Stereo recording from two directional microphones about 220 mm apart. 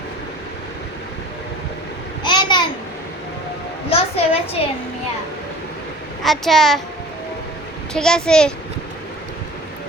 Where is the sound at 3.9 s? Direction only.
25° left (ahead or behind).